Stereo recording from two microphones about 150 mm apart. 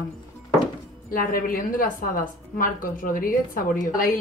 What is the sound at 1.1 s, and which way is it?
A woman's voice, 70° left (ahead or behind).